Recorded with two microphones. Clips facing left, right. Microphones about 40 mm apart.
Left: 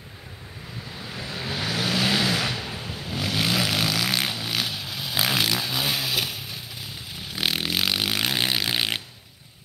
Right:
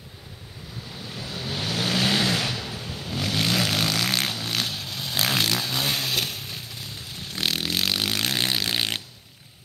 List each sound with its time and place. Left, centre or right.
0.9 s vehicle: left
1.9 s vehicle: centre
2.4 s a sound: centre
3.0 s vehicle: centre